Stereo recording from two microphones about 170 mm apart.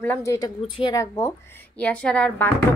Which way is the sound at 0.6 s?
30° left (ahead or behind).